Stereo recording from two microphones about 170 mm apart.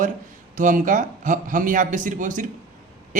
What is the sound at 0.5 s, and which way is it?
A man's voice, 50° right (ahead or behind).